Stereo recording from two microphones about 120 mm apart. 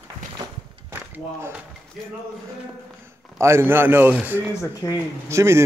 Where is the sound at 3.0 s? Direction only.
20° right (ahead or behind).